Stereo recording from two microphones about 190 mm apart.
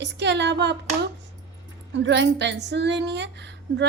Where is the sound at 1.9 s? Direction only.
65° right (ahead or behind).